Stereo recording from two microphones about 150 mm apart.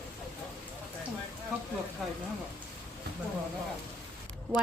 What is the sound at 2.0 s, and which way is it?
Speech, centre (ahead or behind).